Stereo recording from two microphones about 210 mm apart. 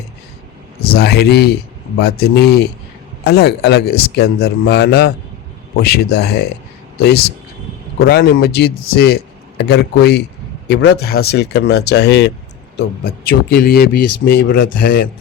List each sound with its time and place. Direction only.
0.9 s a man's voice: 50° left (ahead or behind)
8.0 s a man's voice: 50° left (ahead or behind)